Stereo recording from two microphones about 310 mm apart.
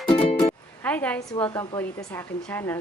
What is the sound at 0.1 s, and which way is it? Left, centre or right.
Music, centre.